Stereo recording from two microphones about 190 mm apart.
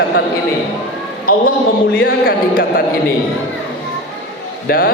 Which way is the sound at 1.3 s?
50° left (ahead or behind).